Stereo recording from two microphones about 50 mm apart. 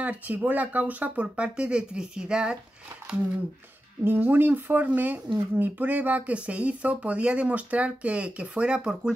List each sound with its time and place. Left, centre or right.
0.0 s speech: right; by 2.5 s centre
4.0 s speech: right; by 9.1 s centre